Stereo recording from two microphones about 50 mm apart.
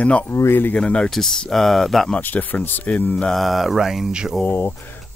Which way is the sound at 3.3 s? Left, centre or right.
Centre.